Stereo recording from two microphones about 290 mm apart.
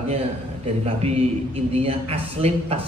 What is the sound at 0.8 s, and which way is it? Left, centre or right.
A man's voice, right.